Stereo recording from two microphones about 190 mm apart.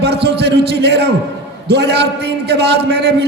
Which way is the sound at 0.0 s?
60° right (ahead or behind).